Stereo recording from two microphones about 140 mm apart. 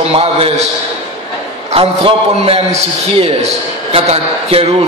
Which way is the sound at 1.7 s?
40° right (ahead or behind).